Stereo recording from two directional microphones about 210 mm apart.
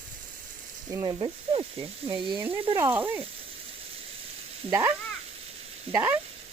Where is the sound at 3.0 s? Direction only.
10° right (ahead or behind).